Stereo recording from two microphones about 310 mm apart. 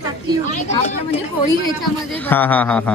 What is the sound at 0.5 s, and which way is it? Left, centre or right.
Speech, left.